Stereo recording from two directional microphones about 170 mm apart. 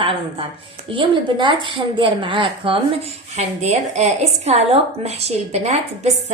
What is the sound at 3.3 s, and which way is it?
A woman's voice, 40° right (ahead or behind).